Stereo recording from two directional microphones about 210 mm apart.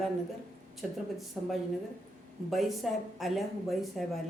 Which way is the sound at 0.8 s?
Centre (ahead or behind).